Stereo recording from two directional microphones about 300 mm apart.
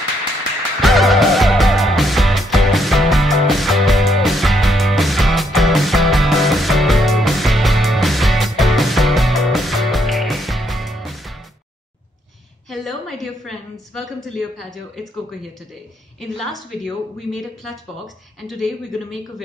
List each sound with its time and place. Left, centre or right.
0.8 s music: centre
12.6 s a sound: centre
16.2 s a woman's voice: centre